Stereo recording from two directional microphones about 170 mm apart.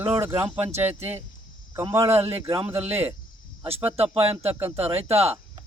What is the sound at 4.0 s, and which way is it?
Speech, 35° right (ahead or behind).